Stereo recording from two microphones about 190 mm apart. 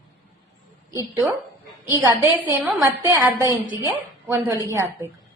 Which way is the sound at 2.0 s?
10° right (ahead or behind).